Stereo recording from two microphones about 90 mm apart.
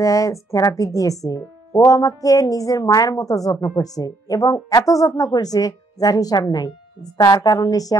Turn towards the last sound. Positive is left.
turn(degrees=45)  # may be behind; listen again after turning